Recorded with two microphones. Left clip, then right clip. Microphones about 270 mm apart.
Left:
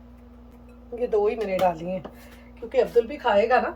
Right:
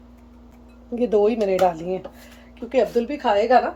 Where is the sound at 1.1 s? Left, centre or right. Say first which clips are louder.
Right 4 dB; right.